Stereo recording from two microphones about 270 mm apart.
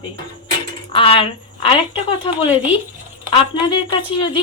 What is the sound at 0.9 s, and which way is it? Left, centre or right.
Speech, centre.